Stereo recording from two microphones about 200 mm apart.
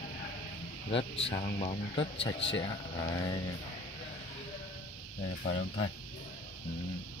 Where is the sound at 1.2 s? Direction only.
30° left (ahead or behind).